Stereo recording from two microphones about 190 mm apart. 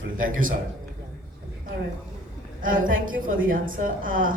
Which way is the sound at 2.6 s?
45° right (ahead or behind).